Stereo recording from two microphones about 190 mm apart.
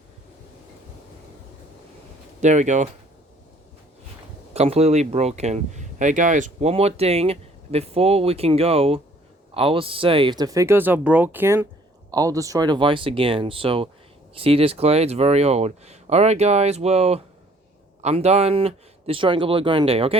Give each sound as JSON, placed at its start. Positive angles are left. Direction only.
{"t": 2.4, "sound": "speech", "side_deg": -40}
{"t": 4.5, "sound": "speech", "side_deg": -35}